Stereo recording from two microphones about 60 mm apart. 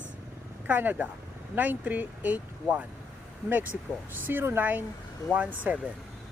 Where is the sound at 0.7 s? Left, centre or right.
Right.